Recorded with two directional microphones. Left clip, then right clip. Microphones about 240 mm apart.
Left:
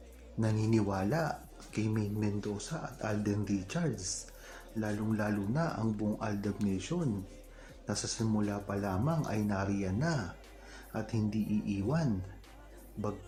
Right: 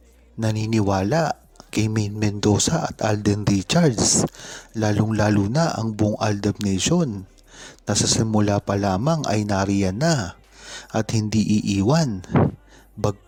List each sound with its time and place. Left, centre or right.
0.3 s speech: right